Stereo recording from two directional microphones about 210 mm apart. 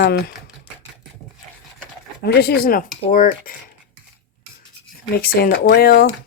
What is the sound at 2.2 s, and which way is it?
Speech, 50° left (ahead or behind).